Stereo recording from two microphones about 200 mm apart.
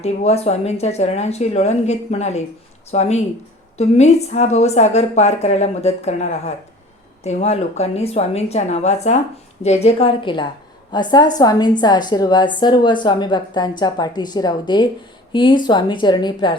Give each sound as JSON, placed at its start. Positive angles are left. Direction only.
{"t": 0.0, "sound": "a woman's voice", "side_deg": 30}